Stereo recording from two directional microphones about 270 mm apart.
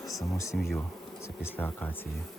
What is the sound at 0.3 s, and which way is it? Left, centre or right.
Speech, centre.